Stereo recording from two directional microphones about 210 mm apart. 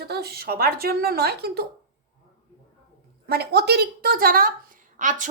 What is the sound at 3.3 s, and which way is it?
A woman's voice, 50° right (ahead or behind).